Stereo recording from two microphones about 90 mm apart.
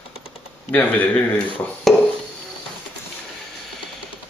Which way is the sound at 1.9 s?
5° left (ahead or behind).